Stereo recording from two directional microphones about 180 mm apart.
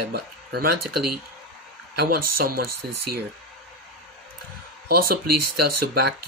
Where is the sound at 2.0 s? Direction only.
55° right (ahead or behind).